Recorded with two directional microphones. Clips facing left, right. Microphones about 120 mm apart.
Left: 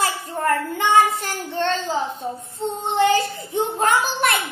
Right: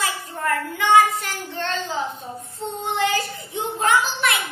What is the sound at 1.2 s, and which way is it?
Child singing, 35° left (ahead or behind).